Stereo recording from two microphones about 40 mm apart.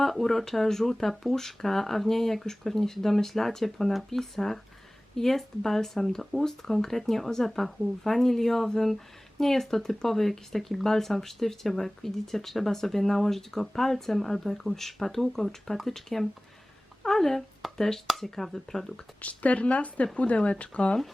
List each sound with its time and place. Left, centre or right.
0.0 s speech: centre
19.2 s speech: left